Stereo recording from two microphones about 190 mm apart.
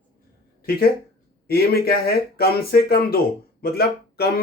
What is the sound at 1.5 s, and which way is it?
Speech, 55° left (ahead or behind).